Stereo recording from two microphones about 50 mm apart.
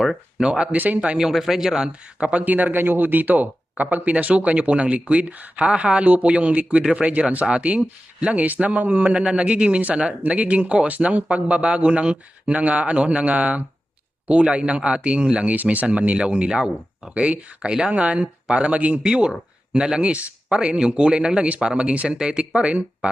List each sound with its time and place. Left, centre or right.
0.3 s speech: centre
0.7 s a man's voice: right
1.2 s speech: centre
2.1 s speech: right
2.4 s a man's voice: right; by 17.2 s centre
17.2 s a man's voice: right